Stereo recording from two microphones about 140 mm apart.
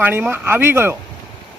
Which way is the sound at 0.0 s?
15° right (ahead or behind).